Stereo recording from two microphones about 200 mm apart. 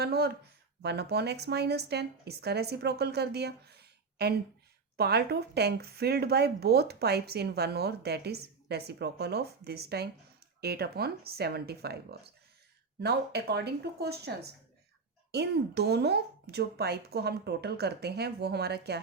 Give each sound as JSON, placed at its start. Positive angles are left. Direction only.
{"t": 0.0, "sound": "speech", "side_deg": -50}